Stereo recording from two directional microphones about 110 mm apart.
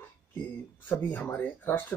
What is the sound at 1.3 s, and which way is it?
Speech, 20° left (ahead or behind).